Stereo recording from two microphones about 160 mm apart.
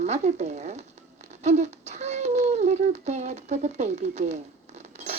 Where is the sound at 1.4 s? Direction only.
45° right (ahead or behind).